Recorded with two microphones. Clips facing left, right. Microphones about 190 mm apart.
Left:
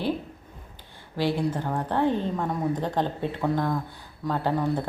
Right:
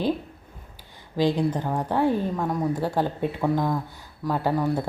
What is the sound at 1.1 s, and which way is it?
Speech, 15° right (ahead or behind).